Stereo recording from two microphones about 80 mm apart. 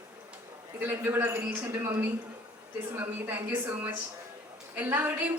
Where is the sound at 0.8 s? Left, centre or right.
Right.